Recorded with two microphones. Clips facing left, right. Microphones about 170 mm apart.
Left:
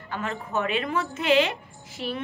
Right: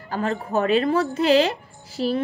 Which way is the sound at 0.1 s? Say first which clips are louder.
Right 6 dB; 35° right (ahead or behind).